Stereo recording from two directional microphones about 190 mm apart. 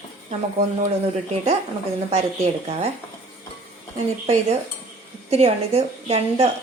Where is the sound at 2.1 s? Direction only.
35° right (ahead or behind).